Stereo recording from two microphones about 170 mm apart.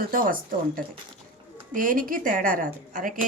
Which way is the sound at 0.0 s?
55° right (ahead or behind).